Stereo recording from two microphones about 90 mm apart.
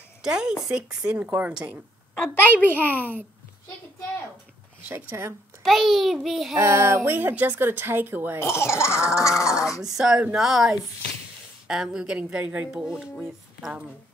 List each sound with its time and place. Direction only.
0.2 s a woman's voice: 10° right (ahead or behind)
2.3 s speech: 25° left (ahead or behind)
4.8 s a woman's voice: 25° right (ahead or behind)
5.6 s speech: centre (ahead or behind)
6.5 s music: 30° right (ahead or behind)
7.1 s a woman's voice: 20° right (ahead or behind)
8.4 s speech: 30° left (ahead or behind)
8.9 s a woman's voice: 10° right (ahead or behind)